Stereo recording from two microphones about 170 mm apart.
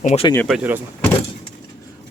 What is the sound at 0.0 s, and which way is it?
Speech, 40° left (ahead or behind).